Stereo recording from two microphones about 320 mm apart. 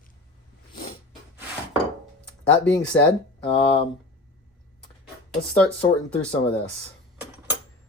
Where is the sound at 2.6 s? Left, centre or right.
Centre.